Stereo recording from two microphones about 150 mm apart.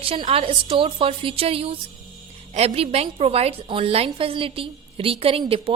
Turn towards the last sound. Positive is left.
turn(degrees=-35)  # may be behind; listen again after turning